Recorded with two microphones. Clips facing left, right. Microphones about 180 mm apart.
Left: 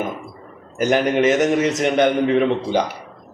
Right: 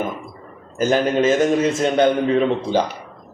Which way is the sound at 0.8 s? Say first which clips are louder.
Even; 15° left (ahead or behind).